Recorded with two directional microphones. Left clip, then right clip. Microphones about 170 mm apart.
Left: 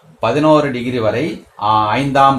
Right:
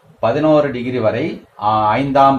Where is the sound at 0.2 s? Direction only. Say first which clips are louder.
Left 1 dB; 30° left (ahead or behind).